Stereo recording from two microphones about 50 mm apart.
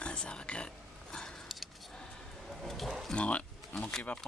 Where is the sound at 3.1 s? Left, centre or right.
Left.